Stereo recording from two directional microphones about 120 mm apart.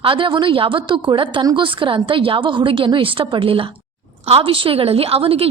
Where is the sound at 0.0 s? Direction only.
45° right (ahead or behind).